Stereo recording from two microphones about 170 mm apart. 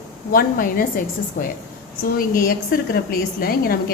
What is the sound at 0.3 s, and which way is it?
A woman's voice, 55° left (ahead or behind).